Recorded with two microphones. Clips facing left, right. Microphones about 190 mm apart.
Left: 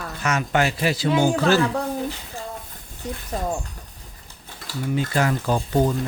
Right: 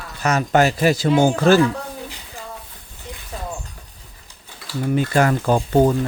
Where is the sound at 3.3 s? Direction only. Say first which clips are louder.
Left 5 dB; 45° left (ahead or behind).